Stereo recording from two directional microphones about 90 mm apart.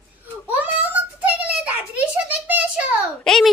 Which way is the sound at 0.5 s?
20° right (ahead or behind).